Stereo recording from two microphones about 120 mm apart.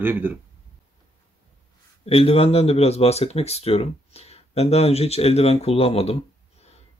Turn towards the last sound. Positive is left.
turn(degrees=55)  # may be behind; listen again after turning